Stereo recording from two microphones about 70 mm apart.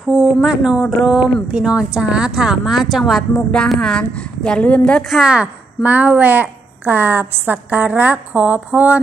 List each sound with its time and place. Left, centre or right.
0.1 s speech: centre
3.6 s a woman's voice: centre
5.1 s a woman's voice: centre